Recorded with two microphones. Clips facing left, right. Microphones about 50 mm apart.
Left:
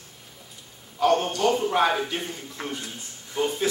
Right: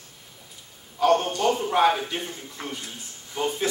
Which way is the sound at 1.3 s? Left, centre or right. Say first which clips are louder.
Left 1 dB; right.